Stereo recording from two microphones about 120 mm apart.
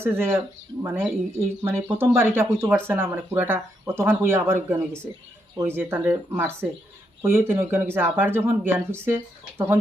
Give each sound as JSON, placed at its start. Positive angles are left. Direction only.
{"t": 0.0, "sound": "speech", "side_deg": -20}